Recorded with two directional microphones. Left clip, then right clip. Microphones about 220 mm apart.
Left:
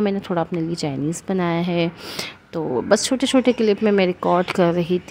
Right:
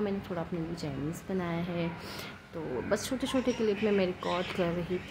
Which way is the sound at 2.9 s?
45° left (ahead or behind).